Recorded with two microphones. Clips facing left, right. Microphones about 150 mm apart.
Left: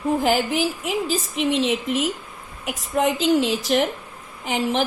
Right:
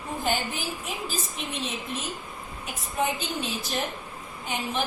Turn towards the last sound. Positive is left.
turn(degrees=90)